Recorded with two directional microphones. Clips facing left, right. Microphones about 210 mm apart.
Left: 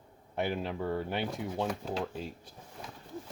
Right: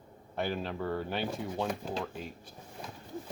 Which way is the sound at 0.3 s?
15° left (ahead or behind).